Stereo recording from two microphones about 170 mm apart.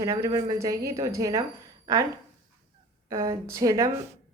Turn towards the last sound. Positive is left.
turn(degrees=-20)  # may be behind; listen again after turning